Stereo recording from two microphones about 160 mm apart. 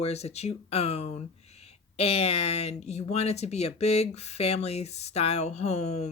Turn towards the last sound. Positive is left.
turn(degrees=45)  # may be behind; listen again after turning